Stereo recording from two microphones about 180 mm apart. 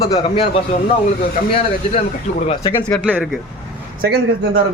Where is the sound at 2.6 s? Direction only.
10° left (ahead or behind).